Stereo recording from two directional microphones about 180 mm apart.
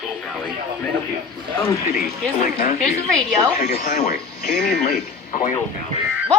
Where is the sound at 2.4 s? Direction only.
50° left (ahead or behind).